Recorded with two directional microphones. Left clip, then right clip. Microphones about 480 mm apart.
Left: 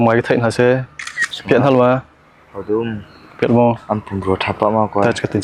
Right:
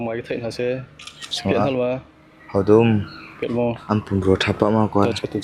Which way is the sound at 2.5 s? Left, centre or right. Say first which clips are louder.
Right 5 dB; right.